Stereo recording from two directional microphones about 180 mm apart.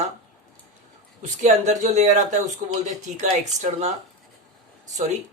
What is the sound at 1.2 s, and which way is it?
Speech, 40° right (ahead or behind).